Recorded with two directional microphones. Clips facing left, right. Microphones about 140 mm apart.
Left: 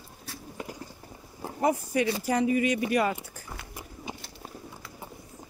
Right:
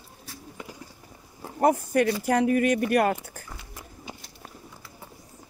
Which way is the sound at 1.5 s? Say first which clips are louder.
Right 4 dB; 55° right (ahead or behind).